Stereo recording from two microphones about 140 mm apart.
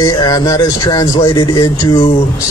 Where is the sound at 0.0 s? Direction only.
30° left (ahead or behind).